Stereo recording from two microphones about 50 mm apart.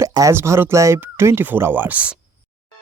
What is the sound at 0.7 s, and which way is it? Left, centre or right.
Speech, right.